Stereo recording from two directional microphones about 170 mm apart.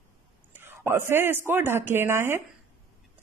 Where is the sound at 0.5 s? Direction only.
15° right (ahead or behind).